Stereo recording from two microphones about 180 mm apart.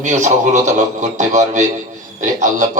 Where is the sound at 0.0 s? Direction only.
40° right (ahead or behind).